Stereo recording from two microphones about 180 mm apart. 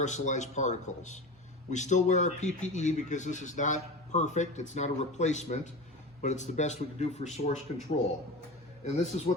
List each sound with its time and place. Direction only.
0.0 s speech: 40° left (ahead or behind)
8.8 s speech: 40° left (ahead or behind)